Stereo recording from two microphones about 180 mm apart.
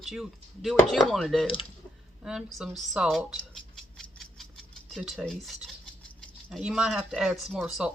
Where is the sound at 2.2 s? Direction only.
Centre (ahead or behind).